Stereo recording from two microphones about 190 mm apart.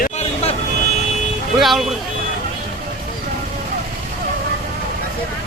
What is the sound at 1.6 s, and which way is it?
Speech, centre (ahead or behind).